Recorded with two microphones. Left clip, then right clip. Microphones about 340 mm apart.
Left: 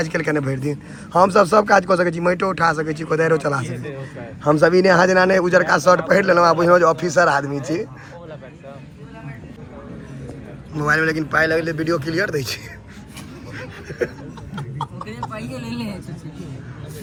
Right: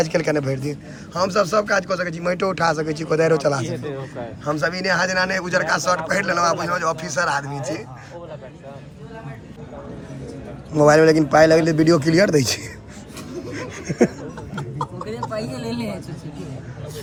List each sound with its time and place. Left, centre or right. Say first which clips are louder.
0.0 s a man's voice: right 1 dB; centre
10.8 s a man's voice: right 6 dB; centre